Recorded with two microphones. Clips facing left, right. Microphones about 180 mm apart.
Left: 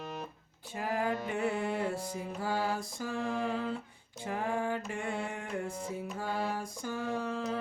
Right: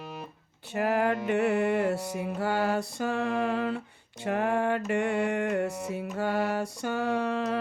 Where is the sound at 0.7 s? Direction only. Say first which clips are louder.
Right 7 dB; 70° right (ahead or behind).